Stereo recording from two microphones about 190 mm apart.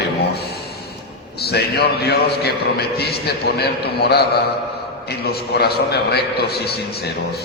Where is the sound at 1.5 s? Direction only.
55° left (ahead or behind).